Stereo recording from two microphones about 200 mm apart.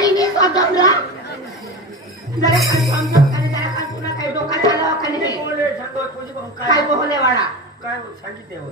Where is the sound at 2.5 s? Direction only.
15° right (ahead or behind).